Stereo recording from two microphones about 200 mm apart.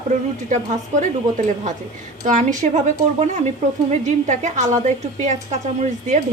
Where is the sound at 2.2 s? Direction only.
40° right (ahead or behind).